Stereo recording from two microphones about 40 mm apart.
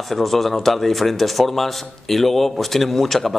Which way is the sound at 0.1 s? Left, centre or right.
Centre.